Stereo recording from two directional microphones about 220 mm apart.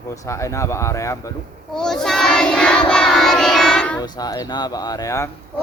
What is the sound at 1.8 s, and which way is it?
Child singing, centre (ahead or behind).